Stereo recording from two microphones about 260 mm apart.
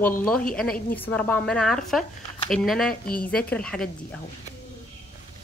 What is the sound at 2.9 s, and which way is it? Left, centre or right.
Speech, left.